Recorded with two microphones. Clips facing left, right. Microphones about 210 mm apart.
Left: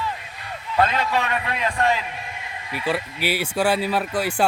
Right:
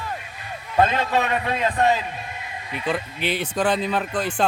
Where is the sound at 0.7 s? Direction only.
20° right (ahead or behind).